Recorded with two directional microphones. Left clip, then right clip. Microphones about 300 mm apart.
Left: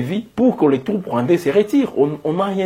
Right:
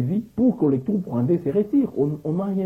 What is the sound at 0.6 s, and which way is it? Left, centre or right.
Speech, centre.